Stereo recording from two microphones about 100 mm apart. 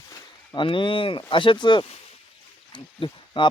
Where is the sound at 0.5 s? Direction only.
55° left (ahead or behind).